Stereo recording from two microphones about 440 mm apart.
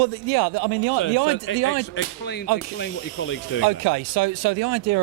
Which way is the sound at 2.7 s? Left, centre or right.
Left.